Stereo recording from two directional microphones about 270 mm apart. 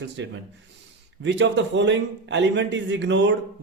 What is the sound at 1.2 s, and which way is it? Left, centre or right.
A man's voice, right.